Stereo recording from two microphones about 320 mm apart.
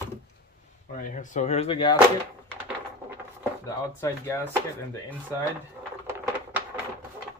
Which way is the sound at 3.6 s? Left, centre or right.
Centre.